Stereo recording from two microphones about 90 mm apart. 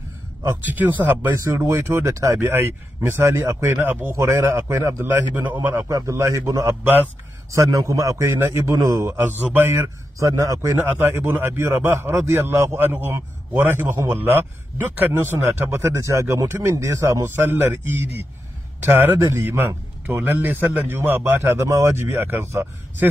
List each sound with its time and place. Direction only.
0.6 s a man's voice: 20° right (ahead or behind)
1.4 s speech: 30° right (ahead or behind)
2.3 s a man's voice: 20° right (ahead or behind)
3.7 s a man's voice: 20° right (ahead or behind)
5.9 s speech: 35° right (ahead or behind)
7.9 s a man's voice: 40° right (ahead or behind)
18.8 s a man's voice: 20° right (ahead or behind)